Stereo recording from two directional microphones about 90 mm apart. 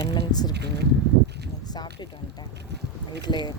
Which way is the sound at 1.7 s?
50° left (ahead or behind).